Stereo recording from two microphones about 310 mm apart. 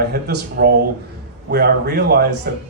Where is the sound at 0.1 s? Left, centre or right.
Right.